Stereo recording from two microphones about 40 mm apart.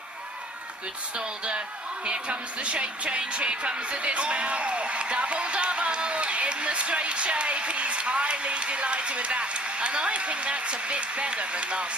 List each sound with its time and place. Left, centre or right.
1.1 s speech: right